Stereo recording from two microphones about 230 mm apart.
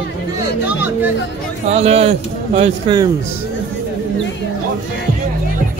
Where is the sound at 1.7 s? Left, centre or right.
Right.